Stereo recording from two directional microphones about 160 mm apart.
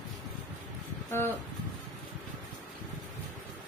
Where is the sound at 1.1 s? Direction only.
15° left (ahead or behind).